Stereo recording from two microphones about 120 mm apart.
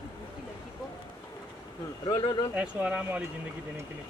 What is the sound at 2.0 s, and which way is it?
Speech, 40° left (ahead or behind).